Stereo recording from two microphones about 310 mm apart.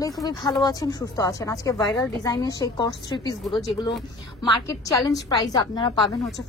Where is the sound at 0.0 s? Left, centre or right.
Centre.